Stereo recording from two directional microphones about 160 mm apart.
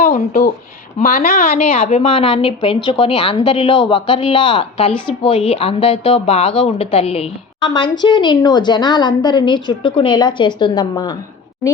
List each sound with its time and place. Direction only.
0.0 s a woman's voice: 65° left (ahead or behind)
2.0 s a woman's voice: 30° left (ahead or behind)